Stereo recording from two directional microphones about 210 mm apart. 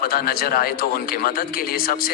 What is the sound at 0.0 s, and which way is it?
Speech, 45° left (ahead or behind).